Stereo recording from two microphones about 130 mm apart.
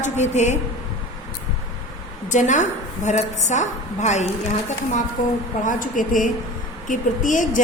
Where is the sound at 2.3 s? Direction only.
70° left (ahead or behind).